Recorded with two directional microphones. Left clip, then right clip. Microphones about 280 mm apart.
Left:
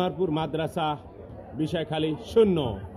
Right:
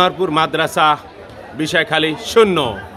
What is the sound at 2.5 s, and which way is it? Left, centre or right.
Speech, right.